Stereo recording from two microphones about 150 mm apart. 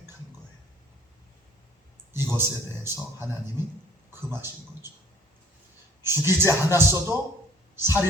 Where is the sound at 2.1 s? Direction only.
15° right (ahead or behind).